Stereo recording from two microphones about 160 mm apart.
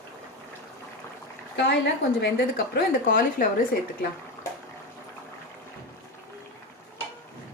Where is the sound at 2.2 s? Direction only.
90° left.